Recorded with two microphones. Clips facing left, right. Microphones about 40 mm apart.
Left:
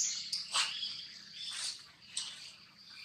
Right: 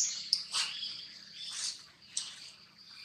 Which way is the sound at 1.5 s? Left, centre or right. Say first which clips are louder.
Even; centre.